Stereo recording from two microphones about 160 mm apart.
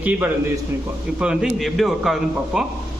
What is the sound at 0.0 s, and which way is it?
A man's voice, 10° right (ahead or behind).